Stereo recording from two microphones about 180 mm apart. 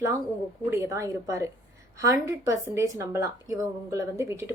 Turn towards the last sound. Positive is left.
turn(degrees=-15)  # may be behind; listen again after turning